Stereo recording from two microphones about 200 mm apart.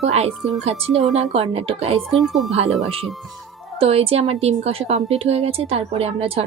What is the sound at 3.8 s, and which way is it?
A woman's voice, 30° right (ahead or behind).